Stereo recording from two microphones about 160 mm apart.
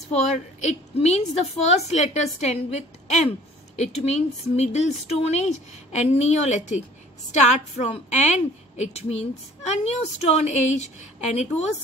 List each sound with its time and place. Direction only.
0.1 s a woman's voice: 45° left (ahead or behind)
7.8 s a woman's voice: 45° left (ahead or behind)